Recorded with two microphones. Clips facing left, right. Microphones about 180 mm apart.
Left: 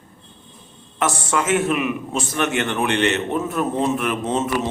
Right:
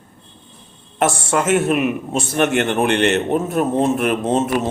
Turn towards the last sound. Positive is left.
turn(degrees=-55)  # may be behind; listen again after turning